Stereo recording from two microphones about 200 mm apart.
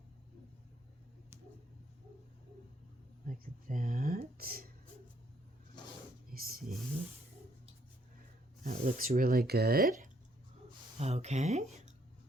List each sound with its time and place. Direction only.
3.2 s speech: 45° right (ahead or behind)
6.3 s speech: 45° right (ahead or behind)
8.6 s speech: 45° right (ahead or behind)
10.9 s speech: 30° right (ahead or behind)